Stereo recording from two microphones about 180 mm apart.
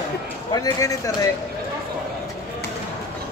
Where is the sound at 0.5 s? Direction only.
20° left (ahead or behind).